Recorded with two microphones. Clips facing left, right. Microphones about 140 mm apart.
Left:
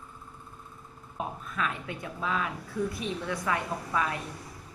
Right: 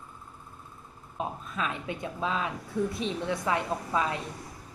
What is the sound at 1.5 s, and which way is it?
A woman's voice, 20° right (ahead or behind).